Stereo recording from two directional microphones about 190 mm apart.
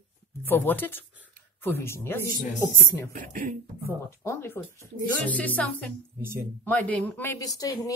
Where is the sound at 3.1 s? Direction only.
45° right (ahead or behind).